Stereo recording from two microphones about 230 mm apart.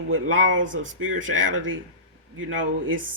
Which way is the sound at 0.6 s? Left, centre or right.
Right.